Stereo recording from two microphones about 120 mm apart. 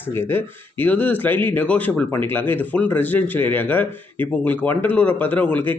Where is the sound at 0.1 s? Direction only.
20° left (ahead or behind).